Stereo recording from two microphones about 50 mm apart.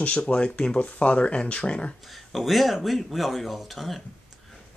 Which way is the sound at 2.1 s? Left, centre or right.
Centre.